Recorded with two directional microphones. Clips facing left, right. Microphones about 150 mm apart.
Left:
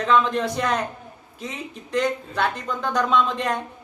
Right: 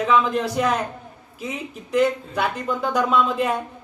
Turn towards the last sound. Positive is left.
turn(degrees=-5)  # may be behind; listen again after turning